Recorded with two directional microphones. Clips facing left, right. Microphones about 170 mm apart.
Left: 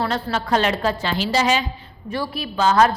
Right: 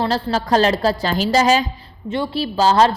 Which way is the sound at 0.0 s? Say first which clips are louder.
Right 3 dB; 35° right (ahead or behind).